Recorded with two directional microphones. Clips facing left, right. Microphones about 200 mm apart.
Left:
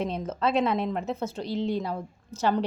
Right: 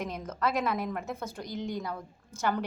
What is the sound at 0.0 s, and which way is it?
A woman's voice, 30° left (ahead or behind).